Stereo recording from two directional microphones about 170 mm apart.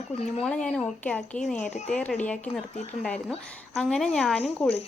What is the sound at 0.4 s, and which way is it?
A woman's voice, 5° left (ahead or behind).